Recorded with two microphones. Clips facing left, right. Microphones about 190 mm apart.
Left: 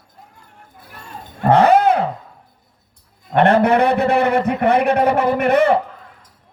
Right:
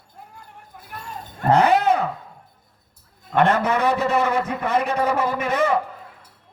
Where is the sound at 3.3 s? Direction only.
60° left (ahead or behind).